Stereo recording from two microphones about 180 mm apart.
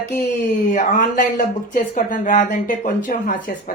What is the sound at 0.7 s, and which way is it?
Speech, 45° left (ahead or behind).